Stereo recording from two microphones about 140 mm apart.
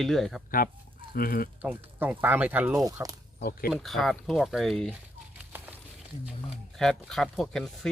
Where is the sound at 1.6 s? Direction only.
15° right (ahead or behind).